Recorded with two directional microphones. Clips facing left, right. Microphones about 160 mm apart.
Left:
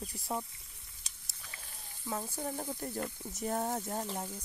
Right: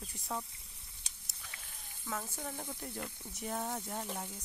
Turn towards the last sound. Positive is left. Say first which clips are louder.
# left 3 dB
turn(degrees=25)  # may be behind; listen again after turning